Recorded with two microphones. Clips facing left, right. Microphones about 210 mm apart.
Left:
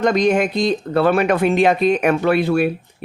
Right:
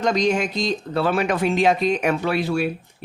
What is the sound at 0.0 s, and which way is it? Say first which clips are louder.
Speech: left 4 dB; 55° left (ahead or behind).